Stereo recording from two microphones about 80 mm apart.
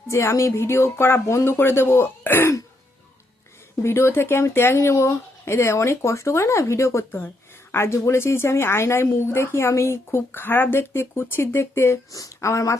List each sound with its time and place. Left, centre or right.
0.1 s speech: left
3.8 s speech: left
12.1 s speech: left